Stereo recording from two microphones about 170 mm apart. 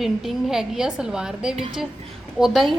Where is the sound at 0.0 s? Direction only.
Centre (ahead or behind).